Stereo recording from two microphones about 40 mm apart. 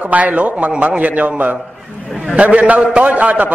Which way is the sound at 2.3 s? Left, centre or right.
Right.